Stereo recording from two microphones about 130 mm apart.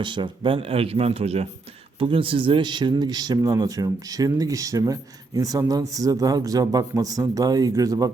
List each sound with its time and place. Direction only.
0.0 s speech: 40° right (ahead or behind)
2.0 s speech: 40° right (ahead or behind)